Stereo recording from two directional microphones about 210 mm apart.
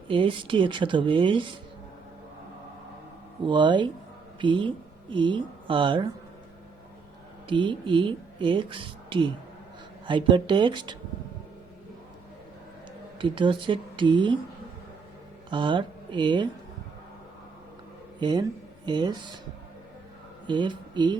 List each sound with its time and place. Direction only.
0.1 s speech: 25° right (ahead or behind)
3.4 s speech: 20° right (ahead or behind)
7.4 s speech: 20° right (ahead or behind)
13.1 s speech: 25° right (ahead or behind)
15.4 s speech: 25° right (ahead or behind)
18.2 s speech: 20° right (ahead or behind)
20.5 s speech: 20° right (ahead or behind)